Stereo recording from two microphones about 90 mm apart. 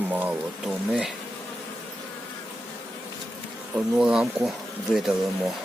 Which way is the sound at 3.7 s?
10° right (ahead or behind).